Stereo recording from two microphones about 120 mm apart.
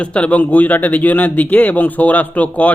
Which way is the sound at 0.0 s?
10° left (ahead or behind).